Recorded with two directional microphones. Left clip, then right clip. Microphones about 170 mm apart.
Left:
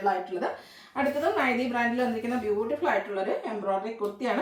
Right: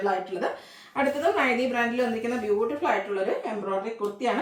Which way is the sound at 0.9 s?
15° right (ahead or behind).